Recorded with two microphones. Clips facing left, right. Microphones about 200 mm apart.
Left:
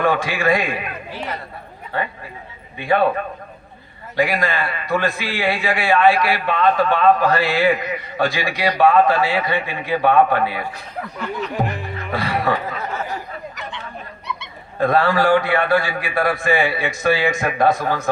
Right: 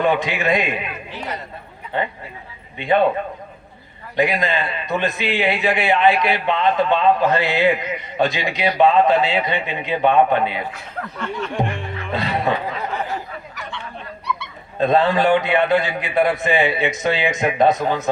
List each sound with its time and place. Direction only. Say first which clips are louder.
0.0 s a man's voice: even; 20° right (ahead or behind)
4.2 s a man's voice: even; 20° right (ahead or behind)
11.2 s snicker: even; 5° left (ahead or behind)
12.1 s speech: even; 20° right (ahead or behind)
13.6 s a sound: even; 20° left (ahead or behind)
14.8 s a man's voice: right 1 dB; 20° right (ahead or behind)